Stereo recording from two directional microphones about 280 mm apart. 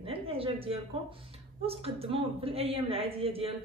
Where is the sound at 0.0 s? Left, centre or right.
Centre.